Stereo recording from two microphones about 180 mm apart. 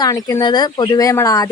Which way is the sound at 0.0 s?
20° left (ahead or behind).